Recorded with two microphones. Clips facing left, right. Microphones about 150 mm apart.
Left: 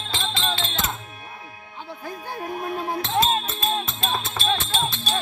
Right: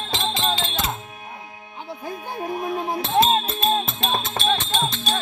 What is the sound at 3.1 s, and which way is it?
Music, 25° right (ahead or behind).